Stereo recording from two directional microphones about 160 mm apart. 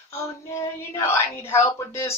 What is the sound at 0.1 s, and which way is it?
Speech, 20° left (ahead or behind).